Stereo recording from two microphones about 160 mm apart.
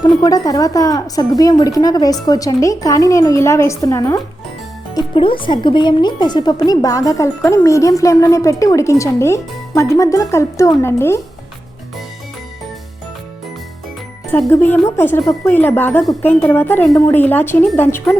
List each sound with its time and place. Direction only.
0.0 s a woman's voice: 20° left (ahead or behind)
5.1 s a woman's voice: 35° left (ahead or behind); by 11.2 s 15° left (ahead or behind)
14.3 s a woman's voice: 10° left (ahead or behind)